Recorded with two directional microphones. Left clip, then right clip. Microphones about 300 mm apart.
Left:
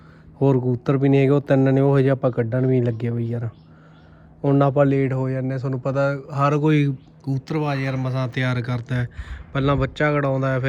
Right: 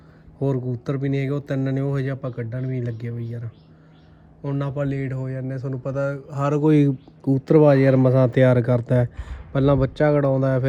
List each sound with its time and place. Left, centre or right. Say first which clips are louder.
0.3 s speech: left 6 dB; centre
7.3 s speech: right 10 dB; right